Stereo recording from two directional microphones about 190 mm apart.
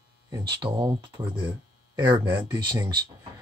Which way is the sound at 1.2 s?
10° right (ahead or behind).